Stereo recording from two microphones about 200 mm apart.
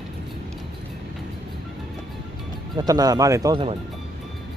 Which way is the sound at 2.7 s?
20° right (ahead or behind).